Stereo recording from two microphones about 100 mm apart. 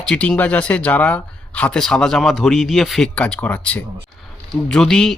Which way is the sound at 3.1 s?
15° left (ahead or behind).